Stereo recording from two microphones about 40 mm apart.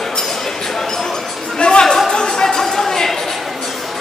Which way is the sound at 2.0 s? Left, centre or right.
Centre.